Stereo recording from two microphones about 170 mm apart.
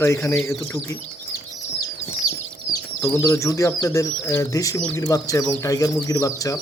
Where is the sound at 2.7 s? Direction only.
15° left (ahead or behind).